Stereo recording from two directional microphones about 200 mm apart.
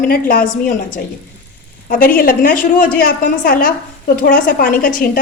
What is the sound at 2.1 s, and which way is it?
A woman's voice, 45° left (ahead or behind).